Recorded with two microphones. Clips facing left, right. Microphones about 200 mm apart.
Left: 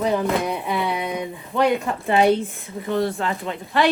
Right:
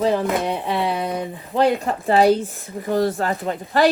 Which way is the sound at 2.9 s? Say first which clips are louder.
Right 3 dB; 40° right (ahead or behind).